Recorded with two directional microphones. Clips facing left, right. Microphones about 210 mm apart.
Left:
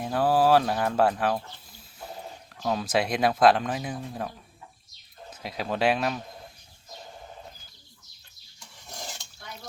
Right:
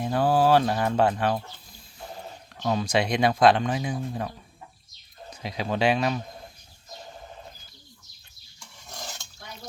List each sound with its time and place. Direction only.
0.0 s speech: 5° left (ahead or behind)
2.6 s speech: centre (ahead or behind)
5.3 s speech: centre (ahead or behind)